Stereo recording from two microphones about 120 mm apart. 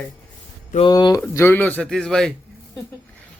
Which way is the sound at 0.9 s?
35° left (ahead or behind).